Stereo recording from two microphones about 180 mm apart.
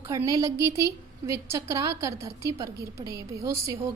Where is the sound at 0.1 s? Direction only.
20° right (ahead or behind).